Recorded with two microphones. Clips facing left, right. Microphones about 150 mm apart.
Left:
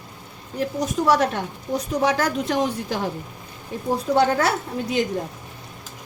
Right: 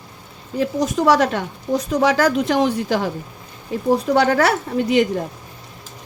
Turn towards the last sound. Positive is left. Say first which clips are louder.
# right 6 dB
turn(degrees=-75)  # may be behind; listen again after turning